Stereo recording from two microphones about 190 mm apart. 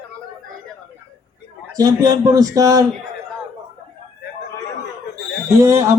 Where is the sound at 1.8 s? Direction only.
20° right (ahead or behind).